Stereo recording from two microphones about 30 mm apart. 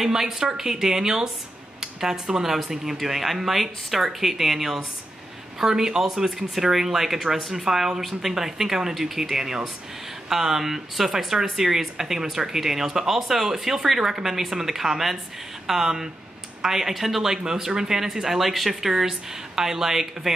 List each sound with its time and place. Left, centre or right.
0.0 s speech: centre